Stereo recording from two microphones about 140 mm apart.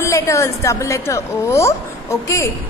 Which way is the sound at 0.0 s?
20° left (ahead or behind).